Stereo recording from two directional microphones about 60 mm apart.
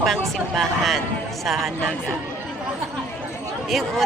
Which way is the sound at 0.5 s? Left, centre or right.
Centre.